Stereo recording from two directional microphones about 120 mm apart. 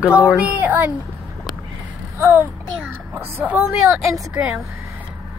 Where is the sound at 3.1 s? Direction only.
20° right (ahead or behind).